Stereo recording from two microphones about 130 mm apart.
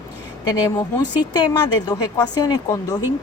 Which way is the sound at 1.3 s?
30° left (ahead or behind).